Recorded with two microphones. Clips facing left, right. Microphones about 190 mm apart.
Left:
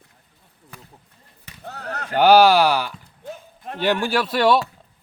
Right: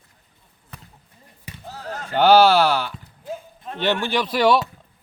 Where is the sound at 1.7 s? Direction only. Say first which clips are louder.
Left 1 dB; 65° left (ahead or behind).